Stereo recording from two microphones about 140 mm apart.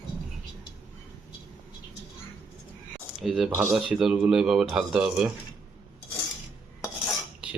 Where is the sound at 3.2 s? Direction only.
Centre (ahead or behind).